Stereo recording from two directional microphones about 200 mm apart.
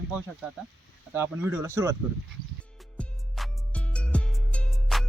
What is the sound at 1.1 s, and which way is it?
Speech, 10° right (ahead or behind).